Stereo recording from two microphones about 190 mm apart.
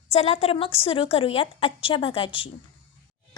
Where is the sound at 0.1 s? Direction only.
35° left (ahead or behind).